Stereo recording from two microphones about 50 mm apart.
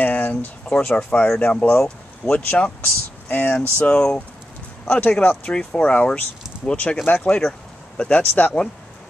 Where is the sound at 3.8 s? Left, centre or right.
Centre.